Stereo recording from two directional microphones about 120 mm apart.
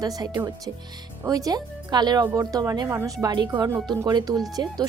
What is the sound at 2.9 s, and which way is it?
Speech, 20° right (ahead or behind).